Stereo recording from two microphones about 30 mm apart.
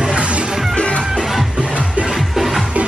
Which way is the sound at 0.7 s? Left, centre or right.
Left.